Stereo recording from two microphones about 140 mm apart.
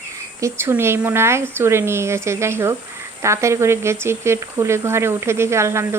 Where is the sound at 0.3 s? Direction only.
20° right (ahead or behind).